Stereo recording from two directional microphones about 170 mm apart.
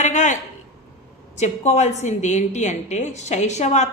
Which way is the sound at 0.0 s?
45° left (ahead or behind).